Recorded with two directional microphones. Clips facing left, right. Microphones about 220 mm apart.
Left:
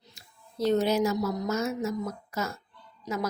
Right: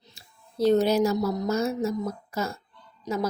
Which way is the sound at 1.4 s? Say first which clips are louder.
Right 3 dB; 30° right (ahead or behind).